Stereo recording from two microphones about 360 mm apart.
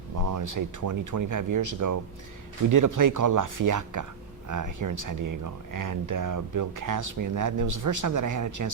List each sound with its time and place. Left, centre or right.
0.2 s speech: right